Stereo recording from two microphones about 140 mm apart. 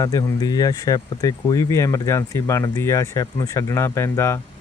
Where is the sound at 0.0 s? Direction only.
20° left (ahead or behind).